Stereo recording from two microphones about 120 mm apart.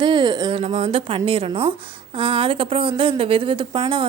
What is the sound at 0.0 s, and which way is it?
Speech, 40° right (ahead or behind).